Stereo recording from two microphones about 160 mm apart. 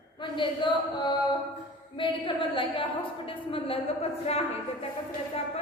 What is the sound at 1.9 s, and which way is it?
A woman's voice, 30° left (ahead or behind).